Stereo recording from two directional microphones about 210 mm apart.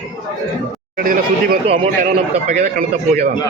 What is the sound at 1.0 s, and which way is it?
Speech, 45° right (ahead or behind).